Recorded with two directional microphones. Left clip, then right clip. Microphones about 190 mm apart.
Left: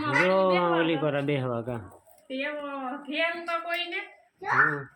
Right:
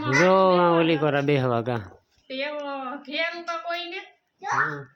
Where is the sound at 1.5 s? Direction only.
50° right (ahead or behind); by 3.9 s 35° right (ahead or behind).